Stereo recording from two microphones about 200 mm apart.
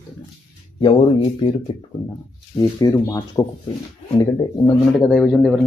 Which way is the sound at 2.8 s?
15° left (ahead or behind).